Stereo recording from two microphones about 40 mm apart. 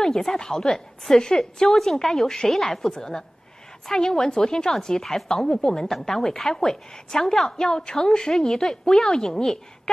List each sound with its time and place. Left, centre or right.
0.0 s a woman's voice: centre
2.9 s a woman's voice: centre
5.9 s a woman's voice: centre